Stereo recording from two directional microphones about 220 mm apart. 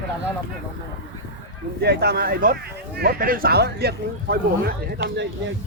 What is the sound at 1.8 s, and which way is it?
Speech, 45° right (ahead or behind).